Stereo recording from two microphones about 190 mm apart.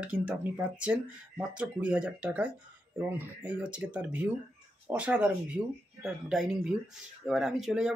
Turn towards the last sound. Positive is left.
turn(degrees=0)  # may be behind; listen again after turning